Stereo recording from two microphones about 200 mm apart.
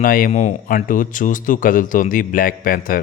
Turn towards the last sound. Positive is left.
turn(degrees=45)  # may be behind; listen again after turning